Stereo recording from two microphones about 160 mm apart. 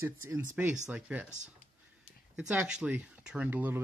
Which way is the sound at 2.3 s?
5° right (ahead or behind).